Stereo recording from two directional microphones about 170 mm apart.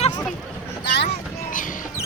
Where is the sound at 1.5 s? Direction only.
50° left (ahead or behind).